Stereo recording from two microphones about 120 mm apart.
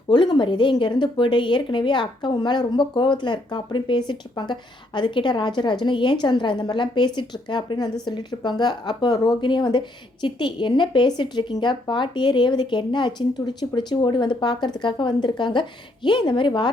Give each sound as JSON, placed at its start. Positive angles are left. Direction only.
{"t": 0.1, "sound": "speech", "side_deg": 40}